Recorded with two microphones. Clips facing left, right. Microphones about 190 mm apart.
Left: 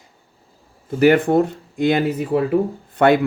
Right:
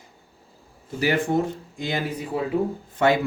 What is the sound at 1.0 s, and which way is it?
Speech, 60° left (ahead or behind).